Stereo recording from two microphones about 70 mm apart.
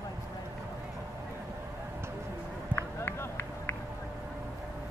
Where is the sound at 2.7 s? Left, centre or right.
Left.